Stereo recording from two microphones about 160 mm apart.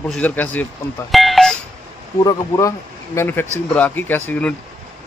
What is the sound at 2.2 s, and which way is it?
Speech, 20° left (ahead or behind).